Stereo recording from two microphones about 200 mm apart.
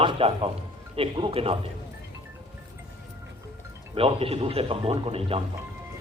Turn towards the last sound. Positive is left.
turn(degrees=-30)  # may be behind; listen again after turning